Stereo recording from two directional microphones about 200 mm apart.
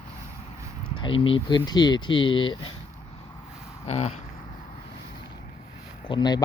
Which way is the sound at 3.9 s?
35° left (ahead or behind).